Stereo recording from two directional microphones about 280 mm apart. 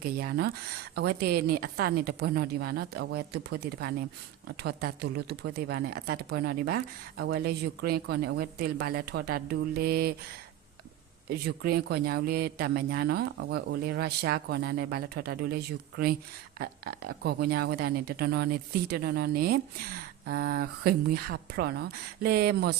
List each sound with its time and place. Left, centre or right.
0.0 s speech: right
11.3 s speech: right